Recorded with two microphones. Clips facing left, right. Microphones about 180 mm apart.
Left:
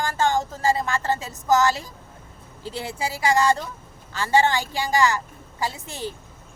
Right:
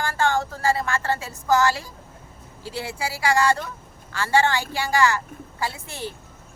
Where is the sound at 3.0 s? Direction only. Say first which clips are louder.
Left 1 dB; 20° left (ahead or behind).